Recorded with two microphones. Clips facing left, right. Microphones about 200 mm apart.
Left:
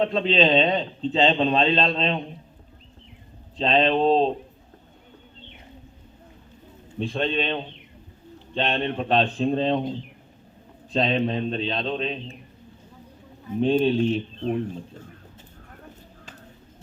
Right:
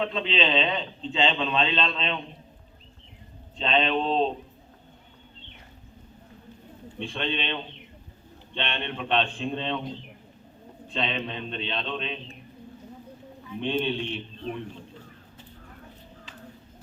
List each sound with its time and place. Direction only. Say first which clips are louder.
0.0 s a man's voice: left 6 dB; 40° left (ahead or behind)
3.6 s a man's voice: left 5 dB; 35° left (ahead or behind)
7.0 s a man's voice: left 6 dB; 40° left (ahead or behind)
10.9 s a man's voice: left 8 dB; 40° left (ahead or behind)
13.5 s a man's voice: left 7 dB; 40° left (ahead or behind)